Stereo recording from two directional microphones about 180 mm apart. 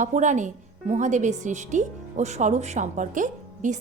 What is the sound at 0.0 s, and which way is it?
A woman's voice, 45° right (ahead or behind).